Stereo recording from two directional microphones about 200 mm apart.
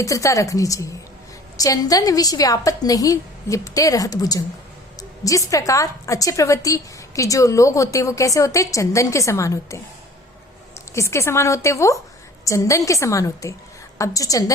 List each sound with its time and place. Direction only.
0.0 s a woman's voice: 15° left (ahead or behind)
10.9 s a woman's voice: 15° left (ahead or behind)